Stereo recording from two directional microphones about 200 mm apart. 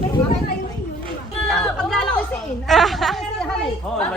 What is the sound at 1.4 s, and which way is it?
Speech, 5° left (ahead or behind).